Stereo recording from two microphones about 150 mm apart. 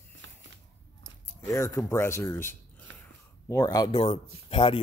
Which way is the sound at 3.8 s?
40° left (ahead or behind).